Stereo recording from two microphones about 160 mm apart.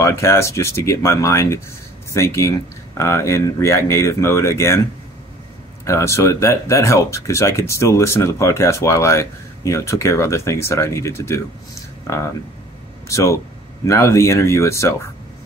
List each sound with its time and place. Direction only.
0.0 s speech: 15° left (ahead or behind)
5.9 s speech: 15° left (ahead or behind)